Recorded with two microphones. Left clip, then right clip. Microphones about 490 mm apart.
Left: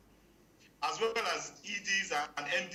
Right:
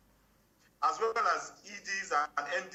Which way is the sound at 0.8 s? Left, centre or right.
Left.